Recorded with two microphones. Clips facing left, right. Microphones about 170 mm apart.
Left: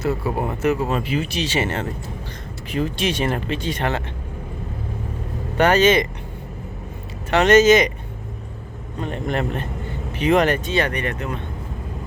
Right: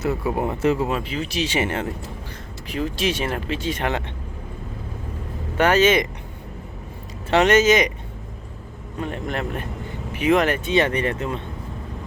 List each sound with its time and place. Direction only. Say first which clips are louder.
0.3 s speech: even; 25° right (ahead or behind)
1.0 s speech: left 4 dB; 5° left (ahead or behind)
1.4 s speech: even; 15° right (ahead or behind)
2.6 s speech: left 1 dB; centre (ahead or behind)
5.5 s speech: left 1 dB; 5° right (ahead or behind)
7.4 s speech: left 5 dB; 10° right (ahead or behind)
9.0 s speech: left 3 dB; centre (ahead or behind)
10.7 s speech: right 2 dB; 25° right (ahead or behind)